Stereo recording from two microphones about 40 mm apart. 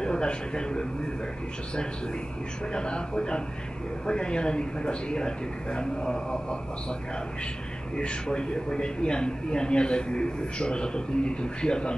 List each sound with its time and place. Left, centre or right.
0.0 s a man's voice: left
2.7 s a man's voice: left